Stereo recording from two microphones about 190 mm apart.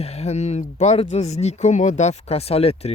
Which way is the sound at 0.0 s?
35° left (ahead or behind).